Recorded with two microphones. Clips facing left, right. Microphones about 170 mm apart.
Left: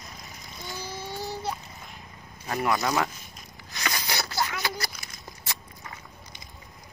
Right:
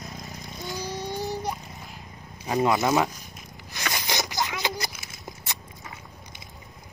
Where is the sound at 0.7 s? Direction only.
15° right (ahead or behind).